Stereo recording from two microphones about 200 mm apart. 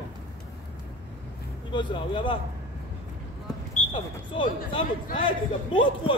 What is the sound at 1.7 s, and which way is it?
Speech, 25° left (ahead or behind).